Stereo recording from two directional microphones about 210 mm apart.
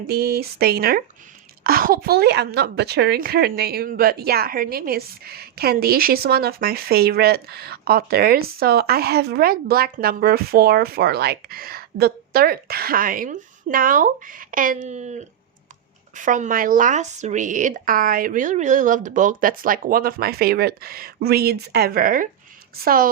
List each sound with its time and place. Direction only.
0.1 s a woman's voice: 50° right (ahead or behind)